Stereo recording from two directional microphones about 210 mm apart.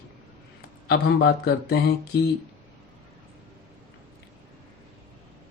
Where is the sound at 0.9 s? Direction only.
50° left (ahead or behind).